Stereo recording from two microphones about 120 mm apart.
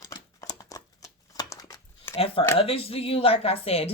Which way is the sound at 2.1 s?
50° left (ahead or behind).